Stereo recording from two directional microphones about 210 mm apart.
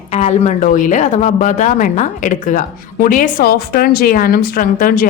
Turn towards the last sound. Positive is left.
turn(degrees=40)  # may be behind; listen again after turning